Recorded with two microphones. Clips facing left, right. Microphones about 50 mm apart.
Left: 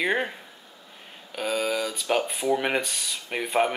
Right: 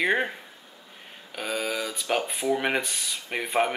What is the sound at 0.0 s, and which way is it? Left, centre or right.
Speech, centre.